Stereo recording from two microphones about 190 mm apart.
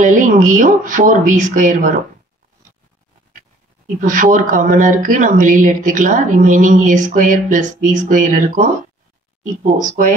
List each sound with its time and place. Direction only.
0.0 s speech: 45° right (ahead or behind)
3.8 s speech: 45° right (ahead or behind)